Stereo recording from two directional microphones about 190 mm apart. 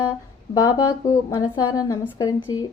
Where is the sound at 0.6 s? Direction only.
15° left (ahead or behind).